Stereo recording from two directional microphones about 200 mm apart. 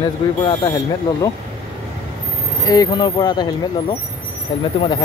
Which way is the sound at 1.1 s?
20° left (ahead or behind).